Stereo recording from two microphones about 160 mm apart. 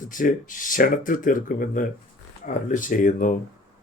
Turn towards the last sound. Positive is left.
turn(degrees=55)  # may be behind; listen again after turning